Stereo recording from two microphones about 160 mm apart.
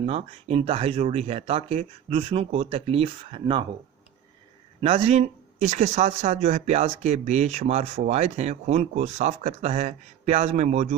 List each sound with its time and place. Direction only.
0.0 s speech: 40° right (ahead or behind)
4.8 s speech: 40° right (ahead or behind)